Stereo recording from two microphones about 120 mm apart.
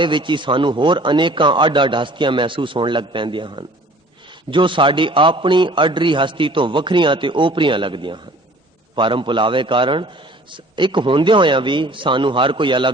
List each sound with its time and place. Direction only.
0.0 s a man's voice: 40° right (ahead or behind)